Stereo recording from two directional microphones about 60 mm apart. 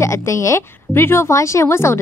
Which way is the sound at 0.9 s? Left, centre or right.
Left.